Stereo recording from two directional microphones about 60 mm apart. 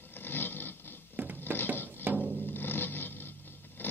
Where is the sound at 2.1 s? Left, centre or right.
Right.